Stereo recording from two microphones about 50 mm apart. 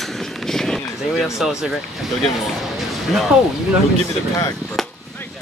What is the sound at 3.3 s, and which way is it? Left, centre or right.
Speech, centre.